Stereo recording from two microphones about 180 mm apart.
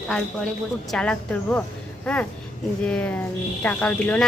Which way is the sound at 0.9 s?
5° left (ahead or behind).